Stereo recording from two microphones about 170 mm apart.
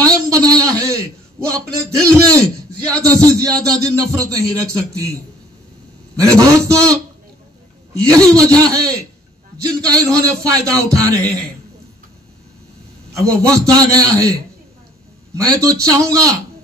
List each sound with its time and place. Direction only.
0.0 s a sound: 20° right (ahead or behind)
1.5 s a man's voice: 20° right (ahead or behind)
6.1 s a man's voice: 20° right (ahead or behind)
10.0 s a man's voice: 20° right (ahead or behind)
13.3 s a man's voice: 20° right (ahead or behind)
15.3 s a man's voice: 20° right (ahead or behind)